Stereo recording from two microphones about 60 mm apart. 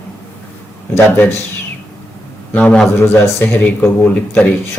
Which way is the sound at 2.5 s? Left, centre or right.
Centre.